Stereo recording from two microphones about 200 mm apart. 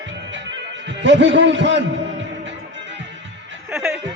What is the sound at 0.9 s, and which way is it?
Speech, 65° right (ahead or behind).